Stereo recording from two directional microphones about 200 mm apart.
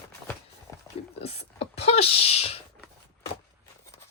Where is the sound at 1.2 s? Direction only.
30° left (ahead or behind).